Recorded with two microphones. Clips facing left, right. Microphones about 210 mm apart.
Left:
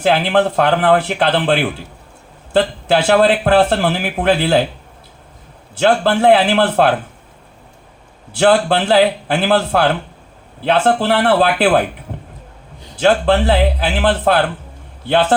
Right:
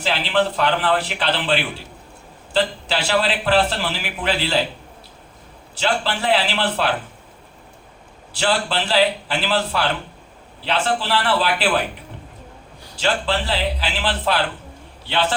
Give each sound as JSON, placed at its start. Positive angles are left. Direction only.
{"t": 0.0, "sound": "a man's voice", "side_deg": 55}
{"t": 5.7, "sound": "a man's voice", "side_deg": 55}
{"t": 8.3, "sound": "a man's voice", "side_deg": 55}
{"t": 13.0, "sound": "a man's voice", "side_deg": 55}